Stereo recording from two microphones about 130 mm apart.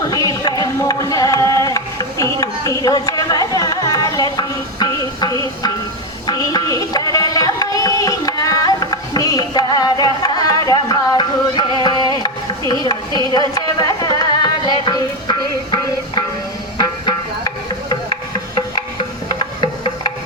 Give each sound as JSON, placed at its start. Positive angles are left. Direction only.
{"t": 0.0, "sound": "music", "side_deg": 25}
{"t": 6.2, "sound": "a sound", "side_deg": 30}
{"t": 13.5, "sound": "speech", "side_deg": 30}
{"t": 14.2, "sound": "music", "side_deg": 35}
{"t": 19.4, "sound": "music", "side_deg": 40}